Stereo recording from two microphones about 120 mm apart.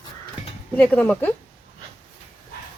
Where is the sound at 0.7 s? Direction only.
10° left (ahead or behind).